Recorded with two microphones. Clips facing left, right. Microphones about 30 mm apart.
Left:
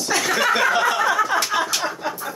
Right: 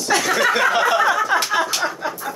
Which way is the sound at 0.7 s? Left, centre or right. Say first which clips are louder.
Right 2 dB; centre.